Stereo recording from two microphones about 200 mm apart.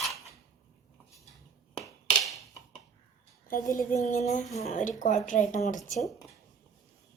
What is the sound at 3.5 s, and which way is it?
Speech, 40° left (ahead or behind).